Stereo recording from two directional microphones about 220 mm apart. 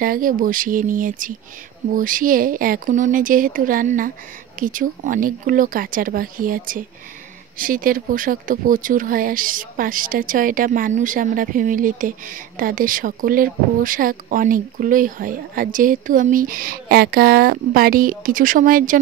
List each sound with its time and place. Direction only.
0.0 s speech: 40° right (ahead or behind)